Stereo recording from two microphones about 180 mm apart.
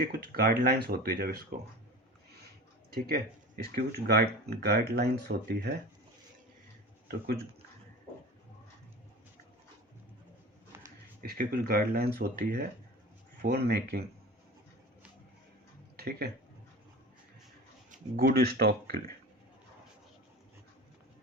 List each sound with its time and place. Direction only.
0.3 s speech: 55° right (ahead or behind)
2.9 s speech: 55° right (ahead or behind)
11.2 s speech: 55° right (ahead or behind)
16.0 s speech: 60° right (ahead or behind)
17.9 s speech: 50° right (ahead or behind)